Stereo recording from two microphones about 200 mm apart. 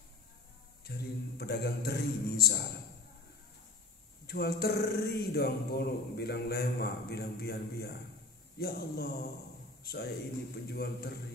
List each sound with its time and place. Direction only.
0.8 s a man's voice: 50° left (ahead or behind)
4.3 s a man's voice: 50° left (ahead or behind)